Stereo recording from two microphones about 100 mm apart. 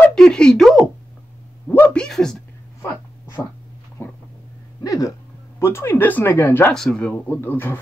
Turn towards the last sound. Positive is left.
turn(degrees=20)  # may be behind; listen again after turning